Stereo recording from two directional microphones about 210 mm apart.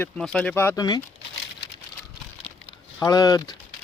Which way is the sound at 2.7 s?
20° left (ahead or behind).